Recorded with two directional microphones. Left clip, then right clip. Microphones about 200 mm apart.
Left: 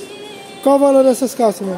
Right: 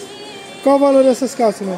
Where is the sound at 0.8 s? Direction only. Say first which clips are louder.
Even; 15° left (ahead or behind).